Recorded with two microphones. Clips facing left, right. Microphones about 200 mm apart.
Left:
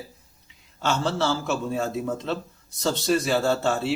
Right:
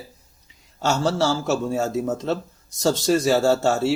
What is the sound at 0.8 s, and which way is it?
A man's voice, 40° right (ahead or behind).